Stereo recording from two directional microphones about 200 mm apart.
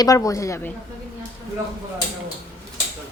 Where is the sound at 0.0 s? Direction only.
15° left (ahead or behind).